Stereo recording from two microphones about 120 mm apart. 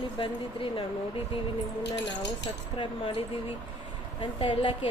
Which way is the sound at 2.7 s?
45° left (ahead or behind).